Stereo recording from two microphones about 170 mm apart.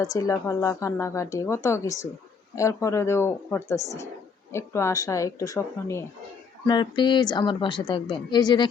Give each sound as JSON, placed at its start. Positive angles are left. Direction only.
{"t": 0.0, "sound": "a woman's voice", "side_deg": 20}